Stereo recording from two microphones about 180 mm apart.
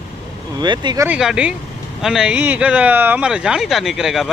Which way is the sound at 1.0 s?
5° right (ahead or behind).